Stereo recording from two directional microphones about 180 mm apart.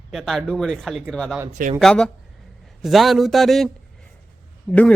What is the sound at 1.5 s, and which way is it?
Speech, 50° right (ahead or behind).